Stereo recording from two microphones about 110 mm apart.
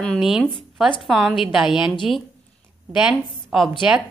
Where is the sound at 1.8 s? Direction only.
50° left (ahead or behind).